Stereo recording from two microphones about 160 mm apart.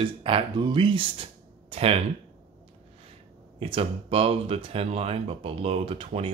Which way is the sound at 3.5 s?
35° right (ahead or behind).